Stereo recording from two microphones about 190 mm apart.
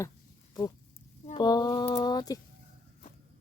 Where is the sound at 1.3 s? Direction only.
20° left (ahead or behind).